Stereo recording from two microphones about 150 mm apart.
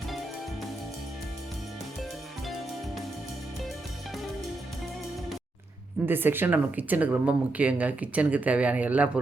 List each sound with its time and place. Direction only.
6.1 s speech: 15° right (ahead or behind)